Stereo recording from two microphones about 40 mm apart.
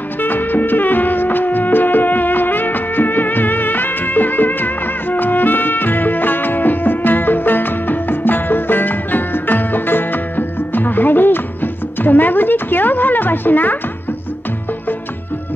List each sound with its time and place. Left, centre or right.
0.2 s music: left